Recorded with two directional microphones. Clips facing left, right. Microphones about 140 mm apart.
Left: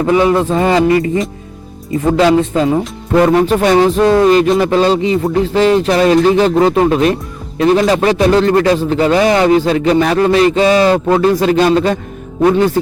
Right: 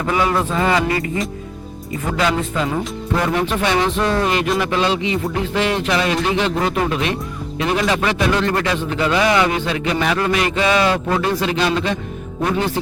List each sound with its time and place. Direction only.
0.0 s a man's voice: 30° left (ahead or behind)